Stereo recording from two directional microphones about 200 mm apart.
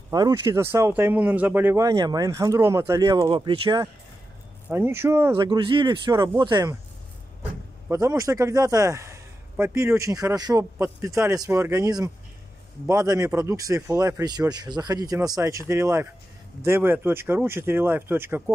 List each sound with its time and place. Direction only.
0.1 s speech: 15° right (ahead or behind)
4.6 s speech: 10° right (ahead or behind)
5.3 s speech: 25° right (ahead or behind)
7.9 s speech: 15° right (ahead or behind)